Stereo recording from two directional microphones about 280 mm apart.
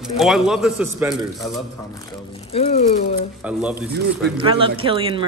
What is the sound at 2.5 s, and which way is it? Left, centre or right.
Speech, left.